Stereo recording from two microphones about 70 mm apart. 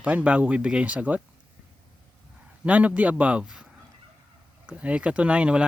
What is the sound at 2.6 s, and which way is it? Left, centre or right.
Speech, right.